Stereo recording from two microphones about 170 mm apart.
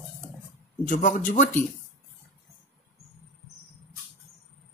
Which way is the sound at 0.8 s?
55° left (ahead or behind).